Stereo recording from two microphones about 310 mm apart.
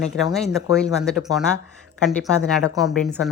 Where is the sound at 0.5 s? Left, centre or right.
Centre.